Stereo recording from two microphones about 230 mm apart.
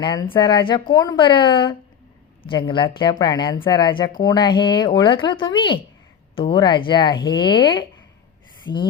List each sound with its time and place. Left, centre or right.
0.0 s speech: centre